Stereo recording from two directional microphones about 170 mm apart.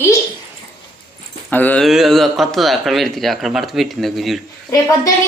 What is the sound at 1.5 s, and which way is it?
Speech, 10° left (ahead or behind).